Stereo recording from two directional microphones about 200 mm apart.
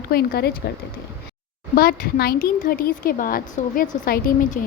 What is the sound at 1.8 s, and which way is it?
A woman's voice, 50° left (ahead or behind).